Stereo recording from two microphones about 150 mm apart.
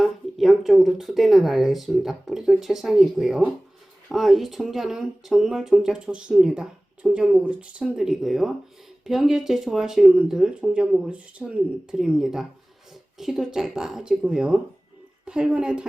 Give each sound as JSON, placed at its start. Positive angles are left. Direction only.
{"t": 0.0, "sound": "speech", "side_deg": 0}